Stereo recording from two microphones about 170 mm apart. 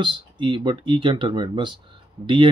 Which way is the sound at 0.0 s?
25° right (ahead or behind).